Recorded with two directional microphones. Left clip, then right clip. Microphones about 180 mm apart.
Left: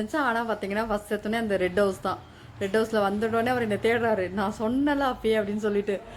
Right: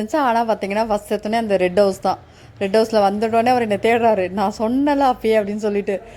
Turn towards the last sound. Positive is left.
turn(degrees=-30)  # may be behind; listen again after turning